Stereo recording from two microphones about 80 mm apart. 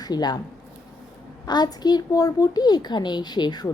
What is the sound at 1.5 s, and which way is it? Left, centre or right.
A woman's voice, left.